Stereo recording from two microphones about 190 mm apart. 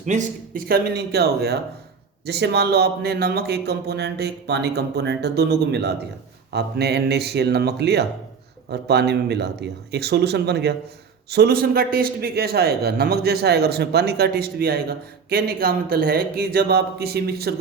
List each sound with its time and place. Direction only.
0.0 s speech: 40° right (ahead or behind)
0.7 s a man's voice: 60° right (ahead or behind)